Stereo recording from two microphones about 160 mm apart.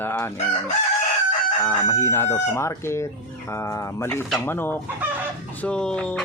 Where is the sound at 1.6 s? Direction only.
15° left (ahead or behind).